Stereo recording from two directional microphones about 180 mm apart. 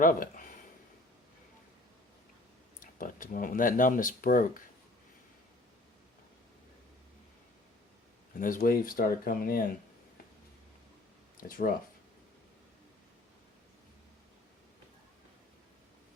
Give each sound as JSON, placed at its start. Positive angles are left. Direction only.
{"t": 0.0, "sound": "speech", "side_deg": 50}
{"t": 2.8, "sound": "speech", "side_deg": 50}
{"t": 8.4, "sound": "speech", "side_deg": 50}
{"t": 11.4, "sound": "speech", "side_deg": 50}